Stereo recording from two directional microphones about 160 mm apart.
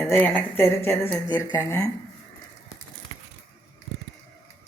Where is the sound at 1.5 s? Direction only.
25° left (ahead or behind).